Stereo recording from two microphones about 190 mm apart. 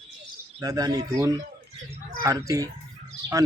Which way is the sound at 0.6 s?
20° right (ahead or behind).